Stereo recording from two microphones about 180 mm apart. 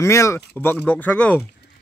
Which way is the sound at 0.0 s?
15° left (ahead or behind).